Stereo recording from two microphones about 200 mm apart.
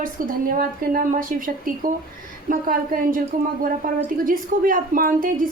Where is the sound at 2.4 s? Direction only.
45° right (ahead or behind).